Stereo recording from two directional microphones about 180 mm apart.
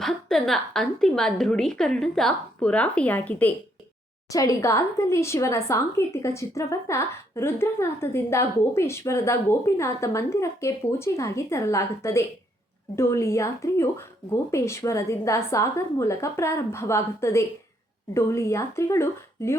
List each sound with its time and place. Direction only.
0.0 s a woman's voice: centre (ahead or behind)